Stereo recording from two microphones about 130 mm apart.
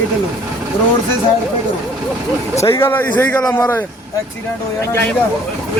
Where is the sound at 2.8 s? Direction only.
15° left (ahead or behind).